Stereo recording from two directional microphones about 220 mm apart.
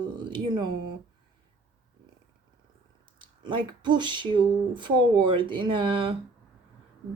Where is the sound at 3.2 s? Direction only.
20° right (ahead or behind).